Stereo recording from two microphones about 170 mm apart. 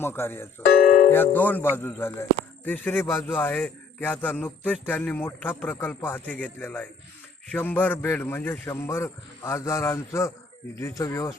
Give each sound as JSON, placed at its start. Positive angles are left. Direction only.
{"t": 0.0, "sound": "a man's voice", "side_deg": 15}